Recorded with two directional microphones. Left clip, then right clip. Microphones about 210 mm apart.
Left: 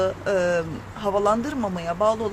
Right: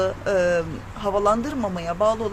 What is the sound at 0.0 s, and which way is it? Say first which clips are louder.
Speech: right 1 dB; 10° right (ahead or behind).